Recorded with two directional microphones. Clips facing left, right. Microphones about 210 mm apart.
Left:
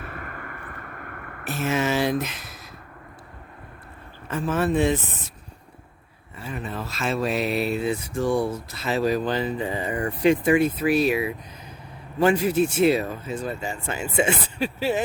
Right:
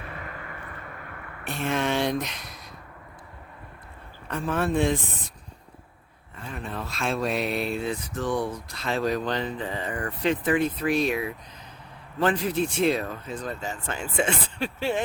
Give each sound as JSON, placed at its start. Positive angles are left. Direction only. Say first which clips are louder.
{"t": 0.0, "sound": "vehicle", "louder": "left 2 dB", "side_deg": 50}
{"t": 1.5, "sound": "speech", "louder": "left 2 dB", "side_deg": 5}
{"t": 4.3, "sound": "speech", "louder": "left 3 dB", "side_deg": 5}
{"t": 6.3, "sound": "speech", "louder": "left 3 dB", "side_deg": 5}